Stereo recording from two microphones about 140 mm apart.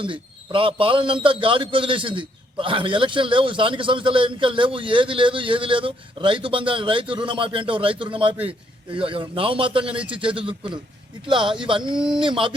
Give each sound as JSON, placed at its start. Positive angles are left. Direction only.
{"t": 0.0, "sound": "a man's voice", "side_deg": -40}
{"t": 11.9, "sound": "speech", "side_deg": -5}
{"t": 12.2, "sound": "a man's voice", "side_deg": -35}